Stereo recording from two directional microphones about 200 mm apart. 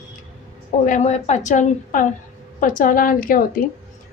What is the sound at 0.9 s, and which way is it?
A woman's voice, 35° left (ahead or behind).